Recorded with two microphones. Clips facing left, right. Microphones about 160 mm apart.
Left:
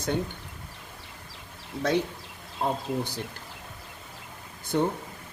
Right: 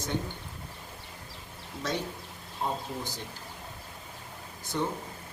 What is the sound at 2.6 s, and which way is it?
Speech, 55° left (ahead or behind).